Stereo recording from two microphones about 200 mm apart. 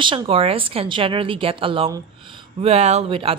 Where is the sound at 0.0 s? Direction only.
25° right (ahead or behind).